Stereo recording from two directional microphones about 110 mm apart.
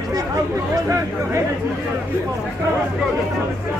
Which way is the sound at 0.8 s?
25° right (ahead or behind).